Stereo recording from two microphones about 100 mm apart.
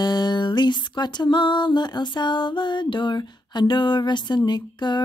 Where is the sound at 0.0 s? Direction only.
45° left (ahead or behind).